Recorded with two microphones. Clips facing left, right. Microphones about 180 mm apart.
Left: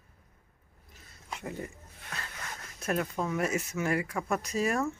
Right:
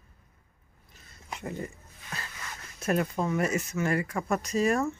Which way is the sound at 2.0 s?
65° left (ahead or behind).